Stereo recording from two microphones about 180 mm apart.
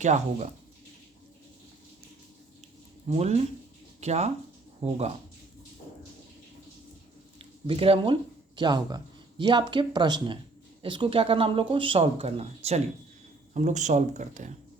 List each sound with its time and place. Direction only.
0.0 s speech: 40° right (ahead or behind)
3.1 s speech: 35° right (ahead or behind)
7.3 s speech: 30° right (ahead or behind)